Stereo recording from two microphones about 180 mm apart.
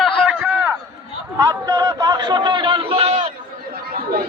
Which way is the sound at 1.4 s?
20° right (ahead or behind).